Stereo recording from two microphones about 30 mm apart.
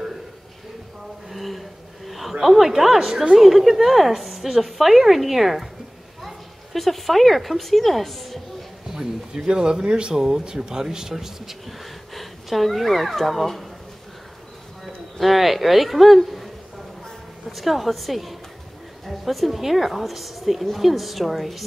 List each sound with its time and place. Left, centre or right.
1.3 s a sound: centre
2.4 s a woman's voice: centre
8.8 s a sound: right
9.6 s speech: right
10.1 s speech: right
11.6 s speech: centre
15.1 s speech: centre
17.5 s speech: centre